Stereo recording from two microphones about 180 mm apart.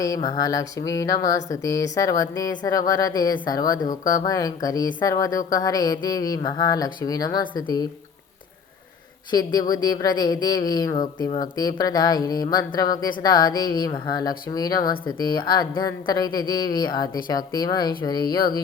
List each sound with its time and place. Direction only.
0.0 s speech: 20° left (ahead or behind)
9.3 s speech: 20° left (ahead or behind)